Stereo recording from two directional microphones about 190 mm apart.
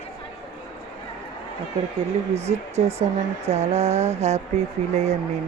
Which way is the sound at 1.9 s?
35° right (ahead or behind).